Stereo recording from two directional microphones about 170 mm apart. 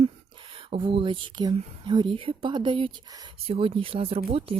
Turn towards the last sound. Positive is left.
turn(degrees=-35)  # may be behind; listen again after turning